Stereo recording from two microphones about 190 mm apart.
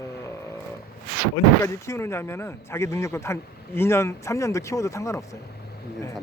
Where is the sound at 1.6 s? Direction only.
15° left (ahead or behind).